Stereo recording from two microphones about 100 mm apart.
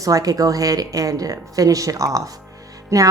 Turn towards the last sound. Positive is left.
turn(degrees=-30)  # may be behind; listen again after turning